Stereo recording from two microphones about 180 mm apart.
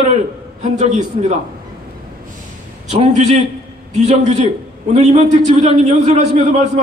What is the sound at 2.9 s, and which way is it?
A man's voice, 40° right (ahead or behind).